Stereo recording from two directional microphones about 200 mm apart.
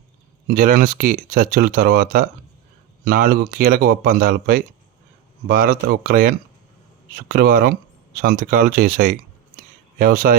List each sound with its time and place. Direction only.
0.4 s speech: 45° right (ahead or behind)